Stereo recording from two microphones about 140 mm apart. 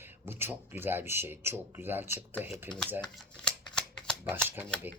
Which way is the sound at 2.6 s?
5° left (ahead or behind).